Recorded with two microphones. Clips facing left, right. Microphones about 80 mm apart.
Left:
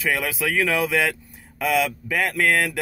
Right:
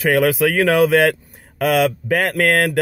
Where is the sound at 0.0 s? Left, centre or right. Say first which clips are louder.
Right 9 dB; right.